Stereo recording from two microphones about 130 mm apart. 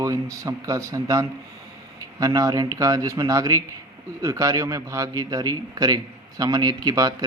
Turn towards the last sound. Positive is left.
turn(degrees=-30)  # may be behind; listen again after turning